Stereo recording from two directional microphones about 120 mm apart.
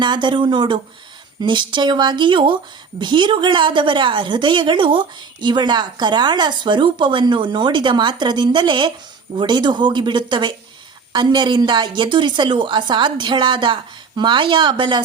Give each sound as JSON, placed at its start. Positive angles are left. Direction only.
{"t": 0.0, "sound": "a woman's voice", "side_deg": -40}